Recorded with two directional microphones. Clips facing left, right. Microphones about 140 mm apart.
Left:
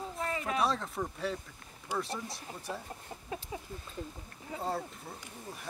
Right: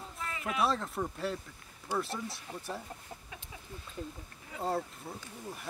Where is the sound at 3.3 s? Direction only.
35° left (ahead or behind).